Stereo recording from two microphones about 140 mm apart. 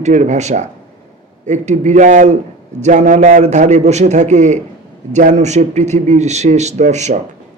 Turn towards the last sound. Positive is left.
turn(degrees=-55)  # may be behind; listen again after turning